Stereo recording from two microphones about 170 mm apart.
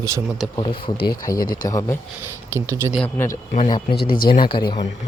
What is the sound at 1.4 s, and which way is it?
Speech, 25° left (ahead or behind).